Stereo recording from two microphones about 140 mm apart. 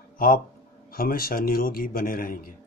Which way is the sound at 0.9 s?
90° left.